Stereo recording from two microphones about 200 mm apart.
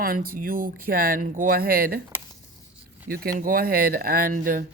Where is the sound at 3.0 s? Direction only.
45° right (ahead or behind).